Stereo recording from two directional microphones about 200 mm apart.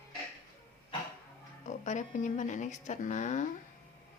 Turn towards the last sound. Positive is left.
turn(degrees=35)  # may be behind; listen again after turning